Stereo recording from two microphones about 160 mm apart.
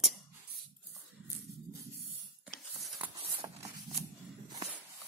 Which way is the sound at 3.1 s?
20° right (ahead or behind).